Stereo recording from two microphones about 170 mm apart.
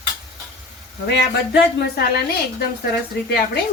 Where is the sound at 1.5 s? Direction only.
70° left (ahead or behind).